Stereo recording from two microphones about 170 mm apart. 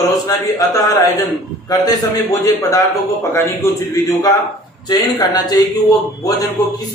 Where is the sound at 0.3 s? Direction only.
20° left (ahead or behind).